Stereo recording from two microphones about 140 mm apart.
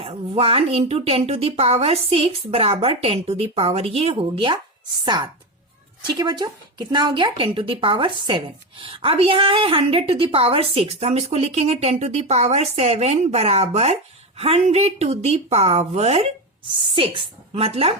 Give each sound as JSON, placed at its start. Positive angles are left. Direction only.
{"t": 0.0, "sound": "a woman's voice", "side_deg": -45}